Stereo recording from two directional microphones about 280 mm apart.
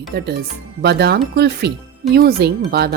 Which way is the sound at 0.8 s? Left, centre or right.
Right.